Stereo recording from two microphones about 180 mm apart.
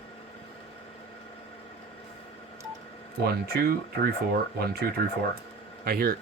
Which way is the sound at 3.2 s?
60° right (ahead or behind).